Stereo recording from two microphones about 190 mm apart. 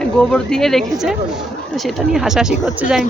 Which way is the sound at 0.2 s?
5° left (ahead or behind).